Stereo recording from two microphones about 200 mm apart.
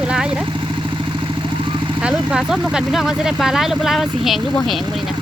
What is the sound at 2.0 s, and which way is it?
Speech, 5° right (ahead or behind).